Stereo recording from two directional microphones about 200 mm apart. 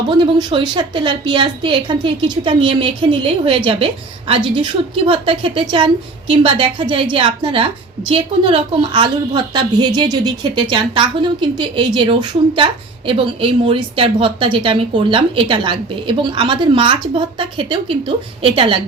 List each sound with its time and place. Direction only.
0.1 s a woman's voice: 25° right (ahead or behind)